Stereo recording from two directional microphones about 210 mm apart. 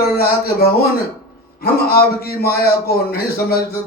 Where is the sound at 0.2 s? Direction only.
50° left (ahead or behind).